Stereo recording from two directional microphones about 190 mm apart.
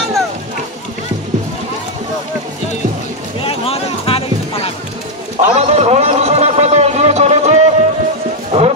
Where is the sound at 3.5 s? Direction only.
30° left (ahead or behind).